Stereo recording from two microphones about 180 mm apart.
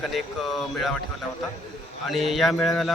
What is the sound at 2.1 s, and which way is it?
Speech, centre (ahead or behind).